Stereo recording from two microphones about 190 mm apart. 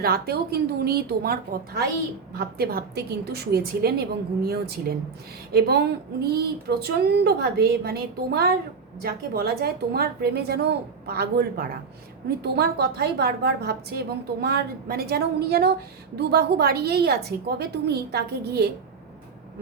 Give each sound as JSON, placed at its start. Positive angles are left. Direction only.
{"t": 0.0, "sound": "a woman's voice", "side_deg": -55}